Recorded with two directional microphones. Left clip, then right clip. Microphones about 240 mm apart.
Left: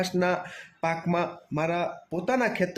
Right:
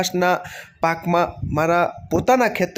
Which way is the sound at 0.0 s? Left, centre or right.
Centre.